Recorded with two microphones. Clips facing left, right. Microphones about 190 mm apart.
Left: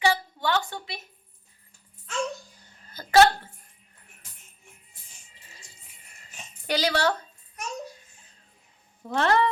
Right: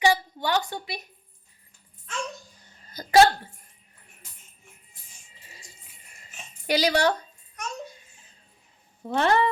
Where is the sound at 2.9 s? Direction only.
15° right (ahead or behind).